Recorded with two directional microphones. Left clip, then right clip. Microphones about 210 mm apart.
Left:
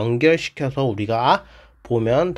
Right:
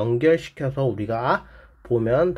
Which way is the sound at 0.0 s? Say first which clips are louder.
Left 2 dB; 30° left (ahead or behind).